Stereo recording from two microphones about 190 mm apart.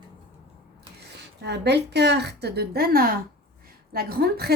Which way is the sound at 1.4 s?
60° right (ahead or behind).